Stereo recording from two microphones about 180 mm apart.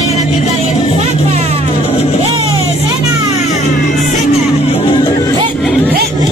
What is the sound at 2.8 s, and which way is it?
Music, 20° right (ahead or behind).